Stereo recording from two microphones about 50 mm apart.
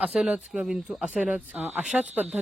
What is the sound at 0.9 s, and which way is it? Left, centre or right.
Speech, right.